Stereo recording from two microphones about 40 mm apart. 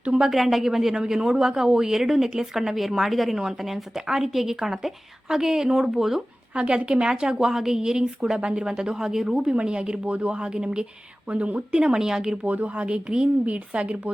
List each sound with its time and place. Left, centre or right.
0.2 s speech: centre
6.5 s speech: right
7.3 s speech: centre
11.3 s speech: right
11.9 s speech: centre
12.5 s speech: right
13.4 s speech: right